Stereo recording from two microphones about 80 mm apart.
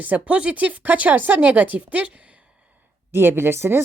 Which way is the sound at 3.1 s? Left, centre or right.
Right.